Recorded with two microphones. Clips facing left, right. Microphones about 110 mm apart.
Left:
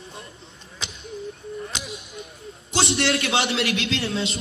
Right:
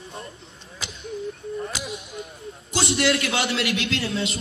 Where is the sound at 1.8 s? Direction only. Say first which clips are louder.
Right 3 dB; 30° right (ahead or behind).